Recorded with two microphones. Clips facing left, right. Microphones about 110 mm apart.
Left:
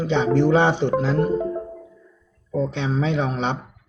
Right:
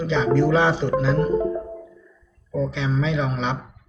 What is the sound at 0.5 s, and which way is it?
Speech, 55° left (ahead or behind).